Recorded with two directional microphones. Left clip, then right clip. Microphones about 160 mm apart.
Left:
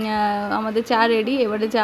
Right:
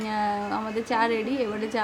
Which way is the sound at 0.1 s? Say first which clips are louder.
Left 5 dB; 35° left (ahead or behind).